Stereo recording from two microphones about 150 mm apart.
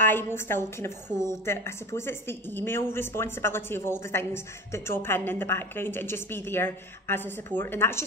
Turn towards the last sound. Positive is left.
turn(degrees=15)  # may be behind; listen again after turning